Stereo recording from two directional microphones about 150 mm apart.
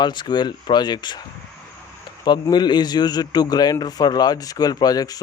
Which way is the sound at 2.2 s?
30° left (ahead or behind).